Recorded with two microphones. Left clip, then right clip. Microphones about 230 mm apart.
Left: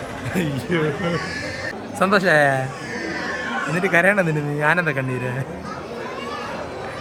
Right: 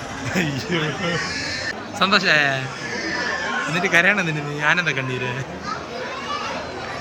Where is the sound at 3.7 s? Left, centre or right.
Centre.